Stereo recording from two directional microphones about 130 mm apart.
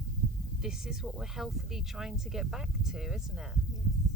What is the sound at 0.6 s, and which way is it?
Speech, 5° right (ahead or behind).